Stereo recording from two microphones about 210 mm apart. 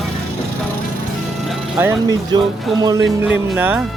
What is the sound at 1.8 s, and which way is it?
Speech, 10° right (ahead or behind).